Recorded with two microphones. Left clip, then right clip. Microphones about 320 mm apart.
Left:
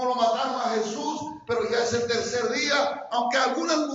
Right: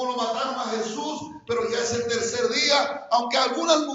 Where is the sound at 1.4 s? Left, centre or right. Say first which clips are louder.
Even; centre.